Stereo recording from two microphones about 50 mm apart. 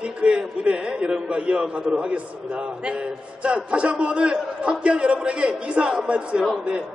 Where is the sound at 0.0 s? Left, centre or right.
Right.